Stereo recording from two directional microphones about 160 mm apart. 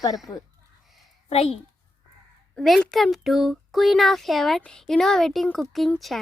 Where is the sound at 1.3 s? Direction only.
40° left (ahead or behind).